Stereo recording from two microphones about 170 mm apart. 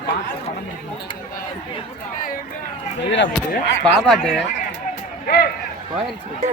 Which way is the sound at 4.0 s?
Centre (ahead or behind).